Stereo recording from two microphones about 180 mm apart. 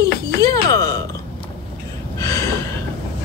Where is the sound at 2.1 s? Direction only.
15° left (ahead or behind).